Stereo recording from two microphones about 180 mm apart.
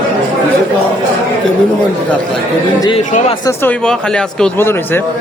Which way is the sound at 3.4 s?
10° left (ahead or behind).